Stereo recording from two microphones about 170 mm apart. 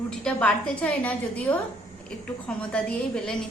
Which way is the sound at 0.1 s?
5° left (ahead or behind).